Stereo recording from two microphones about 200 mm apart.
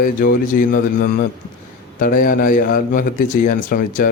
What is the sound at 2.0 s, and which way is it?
A man's voice, 45° left (ahead or behind).